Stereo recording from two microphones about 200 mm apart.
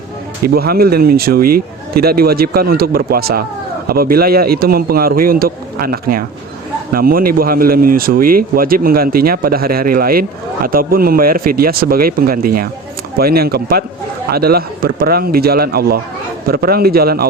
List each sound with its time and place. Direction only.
0.4 s speech: 50° right (ahead or behind)